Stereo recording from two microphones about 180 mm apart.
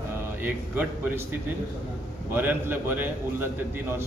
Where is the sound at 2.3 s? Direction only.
10° right (ahead or behind).